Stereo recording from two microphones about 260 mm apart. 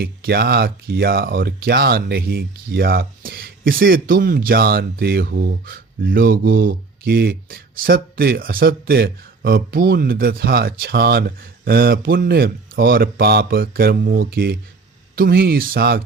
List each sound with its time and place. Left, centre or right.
0.0 s speech: right